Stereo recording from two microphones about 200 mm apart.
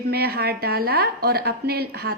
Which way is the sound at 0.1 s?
50° right (ahead or behind).